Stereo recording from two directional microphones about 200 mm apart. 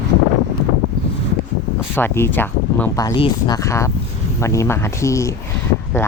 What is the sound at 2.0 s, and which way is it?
Speech, 10° left (ahead or behind).